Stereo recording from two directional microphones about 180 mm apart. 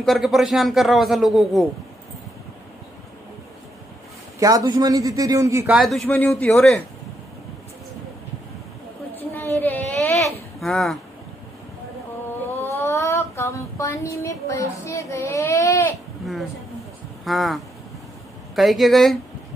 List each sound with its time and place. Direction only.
0.0 s a man's voice: centre (ahead or behind)
4.4 s a man's voice: 20° right (ahead or behind)
5.7 s a man's voice: centre (ahead or behind)
9.3 s a sound: 10° left (ahead or behind)
10.6 s a man's voice: centre (ahead or behind)
12.7 s child singing: 15° left (ahead or behind)
17.2 s a man's voice: centre (ahead or behind)